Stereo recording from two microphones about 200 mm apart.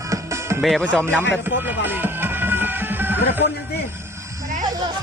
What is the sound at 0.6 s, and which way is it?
Speech, 5° left (ahead or behind).